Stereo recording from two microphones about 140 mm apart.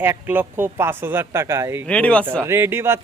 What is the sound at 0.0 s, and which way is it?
Speech, 15° right (ahead or behind).